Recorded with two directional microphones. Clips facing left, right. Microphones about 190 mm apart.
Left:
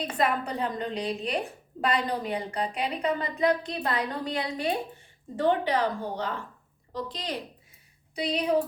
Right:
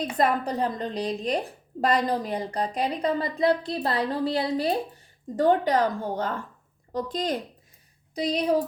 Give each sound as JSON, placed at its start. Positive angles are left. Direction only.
{"t": 0.2, "sound": "a woman's voice", "side_deg": -35}